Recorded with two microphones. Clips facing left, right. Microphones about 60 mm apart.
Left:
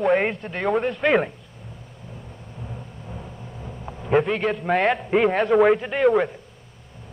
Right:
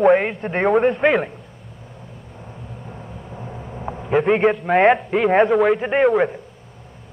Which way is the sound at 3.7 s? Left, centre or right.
Right.